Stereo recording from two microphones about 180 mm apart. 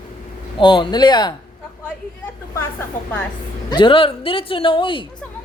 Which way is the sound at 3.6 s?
25° left (ahead or behind).